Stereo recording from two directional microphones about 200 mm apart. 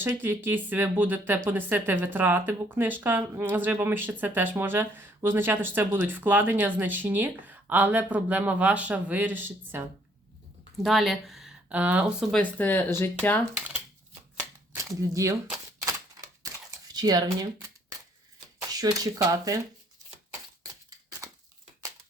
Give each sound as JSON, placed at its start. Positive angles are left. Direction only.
{"t": 0.0, "sound": "speech", "side_deg": -10}
{"t": 10.8, "sound": "speech", "side_deg": 0}
{"t": 14.8, "sound": "speech", "side_deg": -15}
{"t": 16.4, "sound": "a sound", "side_deg": -15}
{"t": 18.7, "sound": "speech", "side_deg": -20}